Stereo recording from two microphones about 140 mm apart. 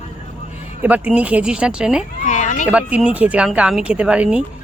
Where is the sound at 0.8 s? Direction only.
10° right (ahead or behind).